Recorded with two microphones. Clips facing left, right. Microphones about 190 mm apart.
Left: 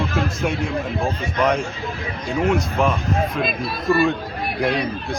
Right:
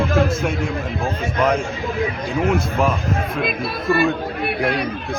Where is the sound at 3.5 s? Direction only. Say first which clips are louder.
Even; 60° right (ahead or behind).